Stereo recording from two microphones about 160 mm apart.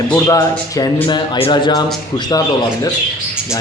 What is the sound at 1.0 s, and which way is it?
Speech, 30° left (ahead or behind).